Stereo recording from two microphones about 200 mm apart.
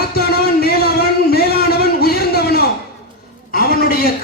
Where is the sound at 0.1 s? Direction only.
50° left (ahead or behind).